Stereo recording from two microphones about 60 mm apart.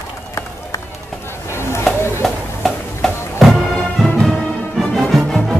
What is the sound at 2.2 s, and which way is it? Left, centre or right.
Music, centre.